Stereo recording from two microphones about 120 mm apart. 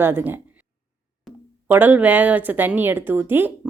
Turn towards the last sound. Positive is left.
turn(degrees=-15)  # may be behind; listen again after turning